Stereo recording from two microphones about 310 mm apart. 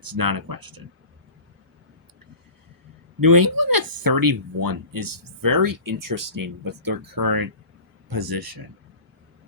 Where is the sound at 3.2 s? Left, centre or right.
Right.